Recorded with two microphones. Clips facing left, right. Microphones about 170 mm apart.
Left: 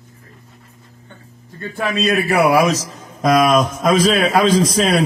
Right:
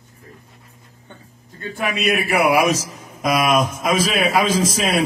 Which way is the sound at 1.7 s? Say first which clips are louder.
Left 3 dB; 10° right (ahead or behind).